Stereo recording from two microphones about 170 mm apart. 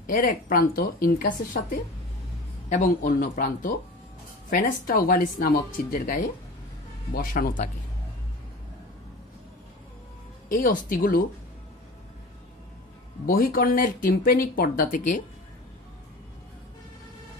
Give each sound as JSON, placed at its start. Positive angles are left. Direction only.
{"t": 0.0, "sound": "speech", "side_deg": 55}
{"t": 10.5, "sound": "speech", "side_deg": 55}
{"t": 13.3, "sound": "speech", "side_deg": 55}